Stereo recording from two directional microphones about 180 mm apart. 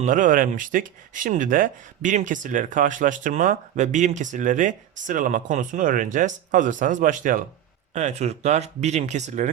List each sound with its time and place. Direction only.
0.0 s speech: 45° right (ahead or behind)